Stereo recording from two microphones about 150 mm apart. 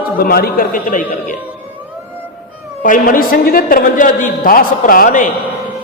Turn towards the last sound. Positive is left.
turn(degrees=65)  # may be behind; listen again after turning